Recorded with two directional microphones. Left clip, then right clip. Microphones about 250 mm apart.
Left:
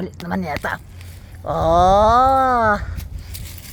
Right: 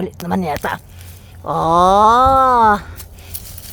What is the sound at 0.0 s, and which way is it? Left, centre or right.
Speech, right.